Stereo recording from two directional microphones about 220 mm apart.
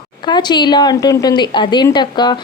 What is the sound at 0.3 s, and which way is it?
A woman's voice, 20° left (ahead or behind).